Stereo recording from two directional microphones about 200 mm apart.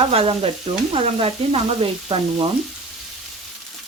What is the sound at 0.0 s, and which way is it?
Frying, 30° right (ahead or behind).